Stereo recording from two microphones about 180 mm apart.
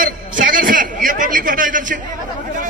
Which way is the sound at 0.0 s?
50° right (ahead or behind).